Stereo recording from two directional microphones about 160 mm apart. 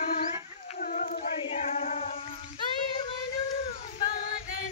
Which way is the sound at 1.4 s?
45° left (ahead or behind).